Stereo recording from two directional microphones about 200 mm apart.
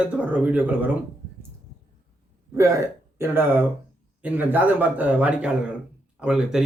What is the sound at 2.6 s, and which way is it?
Speech, 15° right (ahead or behind).